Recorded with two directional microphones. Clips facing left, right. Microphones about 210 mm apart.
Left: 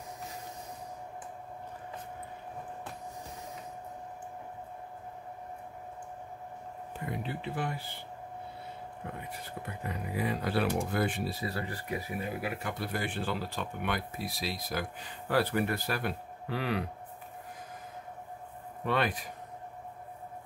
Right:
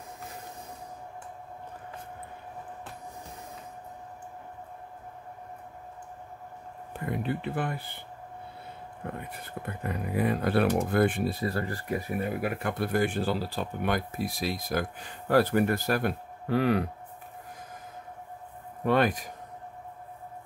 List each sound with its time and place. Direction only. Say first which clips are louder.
7.1 s speech: right 6 dB; 55° right (ahead or behind)
9.0 s speech: right 5 dB; 55° right (ahead or behind)
18.9 s speech: right 6 dB; 45° right (ahead or behind)